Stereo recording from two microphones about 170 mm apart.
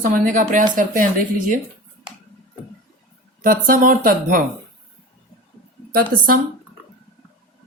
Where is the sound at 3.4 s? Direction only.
55° right (ahead or behind).